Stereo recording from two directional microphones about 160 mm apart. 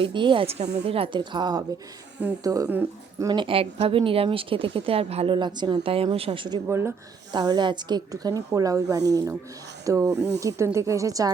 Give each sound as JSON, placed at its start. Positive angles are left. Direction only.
{"t": 0.0, "sound": "a woman's voice", "side_deg": -30}
{"t": 6.7, "sound": "a woman's voice", "side_deg": -15}